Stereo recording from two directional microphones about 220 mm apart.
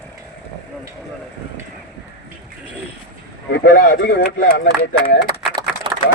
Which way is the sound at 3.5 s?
50° left (ahead or behind).